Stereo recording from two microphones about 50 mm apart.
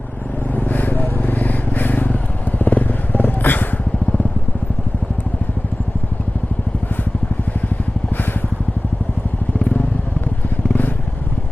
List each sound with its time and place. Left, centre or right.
0.5 s vehicle: left
2.6 s motorcycle: left
8.1 s vehicle: left